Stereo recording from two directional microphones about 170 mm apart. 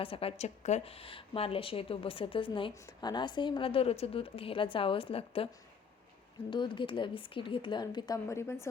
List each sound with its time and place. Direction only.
0.0 s a woman's voice: 35° left (ahead or behind)
6.5 s speech: 30° left (ahead or behind)